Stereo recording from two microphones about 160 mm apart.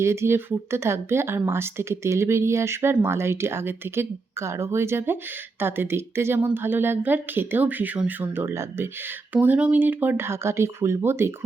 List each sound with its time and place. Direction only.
0.0 s speech: 15° right (ahead or behind)